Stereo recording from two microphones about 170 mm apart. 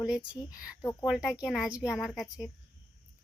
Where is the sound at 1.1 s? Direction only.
Centre (ahead or behind).